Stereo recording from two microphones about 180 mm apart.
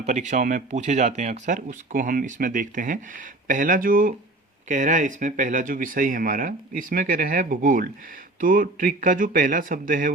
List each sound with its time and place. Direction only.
0.0 s speech: 40° right (ahead or behind)